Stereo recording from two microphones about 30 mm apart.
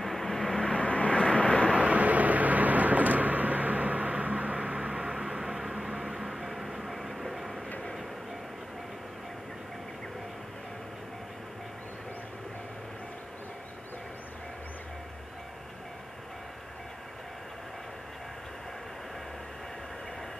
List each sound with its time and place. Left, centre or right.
0.0 s vehicle: centre
0.7 s vehicle: left
1.7 s vehicle: right
4.6 s a sound: right; by 6.2 s centre
6.2 s music: centre